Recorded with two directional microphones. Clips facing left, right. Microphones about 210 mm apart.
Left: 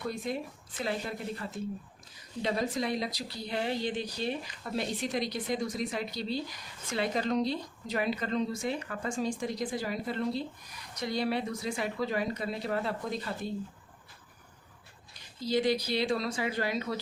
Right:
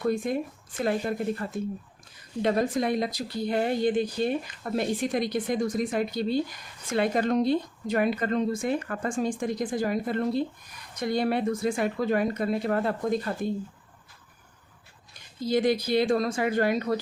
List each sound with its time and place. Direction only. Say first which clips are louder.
0.0 s a woman's voice: right 8 dB; 50° right (ahead or behind)
15.4 s a woman's voice: right 4 dB; 50° right (ahead or behind)